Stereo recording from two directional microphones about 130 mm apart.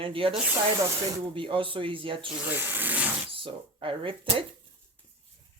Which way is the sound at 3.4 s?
40° right (ahead or behind).